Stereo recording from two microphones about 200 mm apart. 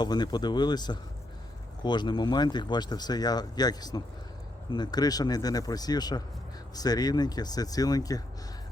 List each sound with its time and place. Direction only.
0.0 s speech: 20° left (ahead or behind)